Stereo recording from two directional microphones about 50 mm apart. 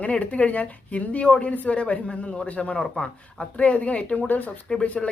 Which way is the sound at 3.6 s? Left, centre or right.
Left.